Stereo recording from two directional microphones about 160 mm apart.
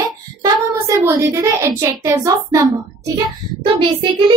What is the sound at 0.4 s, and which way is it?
A child's voice, 20° right (ahead or behind).